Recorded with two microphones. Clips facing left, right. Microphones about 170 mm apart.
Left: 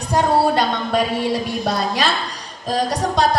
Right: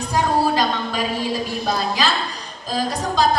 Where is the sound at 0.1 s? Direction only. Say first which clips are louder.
Left 3 dB; 65° left (ahead or behind).